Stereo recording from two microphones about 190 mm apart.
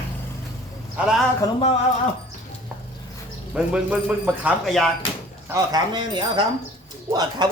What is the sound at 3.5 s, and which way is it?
Speech, 5° right (ahead or behind).